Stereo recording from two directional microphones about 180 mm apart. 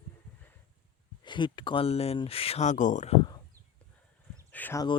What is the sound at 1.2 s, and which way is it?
Speech, 25° left (ahead or behind).